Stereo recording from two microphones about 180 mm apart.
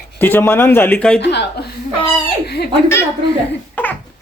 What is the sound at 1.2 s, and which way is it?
Speech, 70° left (ahead or behind).